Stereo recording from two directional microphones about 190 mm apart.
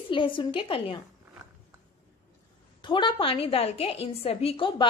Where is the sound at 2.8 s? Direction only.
25° left (ahead or behind).